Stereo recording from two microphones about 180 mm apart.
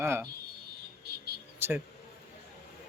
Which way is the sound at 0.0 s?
15° right (ahead or behind).